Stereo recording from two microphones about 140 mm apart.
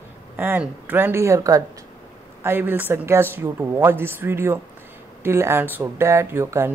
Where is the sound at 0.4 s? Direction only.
15° right (ahead or behind).